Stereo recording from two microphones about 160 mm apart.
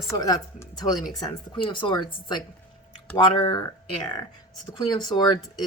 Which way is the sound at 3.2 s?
25° left (ahead or behind).